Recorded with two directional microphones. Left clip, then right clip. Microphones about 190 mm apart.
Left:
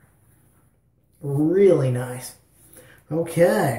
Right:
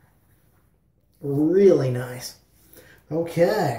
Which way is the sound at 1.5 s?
15° right (ahead or behind).